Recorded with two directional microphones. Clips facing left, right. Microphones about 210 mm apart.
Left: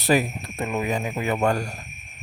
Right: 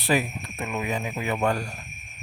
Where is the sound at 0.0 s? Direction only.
40° left (ahead or behind).